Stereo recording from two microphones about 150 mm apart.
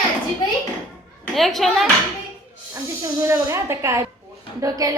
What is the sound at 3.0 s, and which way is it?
A woman's voice, 20° right (ahead or behind).